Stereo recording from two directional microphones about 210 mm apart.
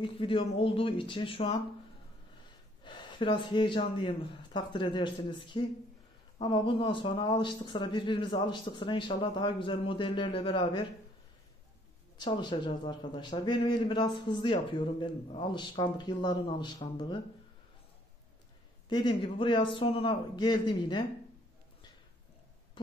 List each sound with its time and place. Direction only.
0.0 s a man's voice: 25° left (ahead or behind)
2.8 s a man's voice: 20° left (ahead or behind)
12.2 s a man's voice: 20° left (ahead or behind)
18.9 s a man's voice: 20° left (ahead or behind)